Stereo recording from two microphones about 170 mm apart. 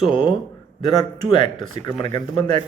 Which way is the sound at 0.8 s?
25° left (ahead or behind).